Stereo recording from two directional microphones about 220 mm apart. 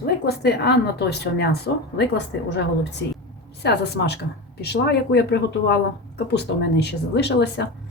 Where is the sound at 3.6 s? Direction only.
50° left (ahead or behind).